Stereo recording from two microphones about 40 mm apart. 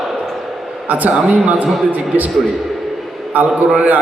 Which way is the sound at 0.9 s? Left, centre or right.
Right.